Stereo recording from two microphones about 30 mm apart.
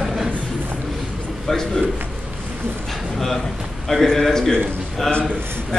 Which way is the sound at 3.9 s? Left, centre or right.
Centre.